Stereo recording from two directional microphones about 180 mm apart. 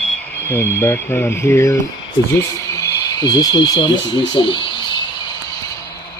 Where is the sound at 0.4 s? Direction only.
10° left (ahead or behind).